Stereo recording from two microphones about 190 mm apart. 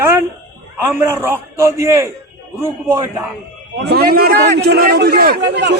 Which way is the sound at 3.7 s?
55° right (ahead or behind).